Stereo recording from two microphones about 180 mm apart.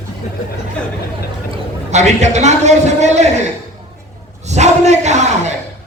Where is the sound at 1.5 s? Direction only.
40° right (ahead or behind).